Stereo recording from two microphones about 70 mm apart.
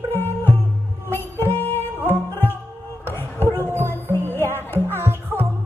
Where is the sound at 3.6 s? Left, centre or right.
Right.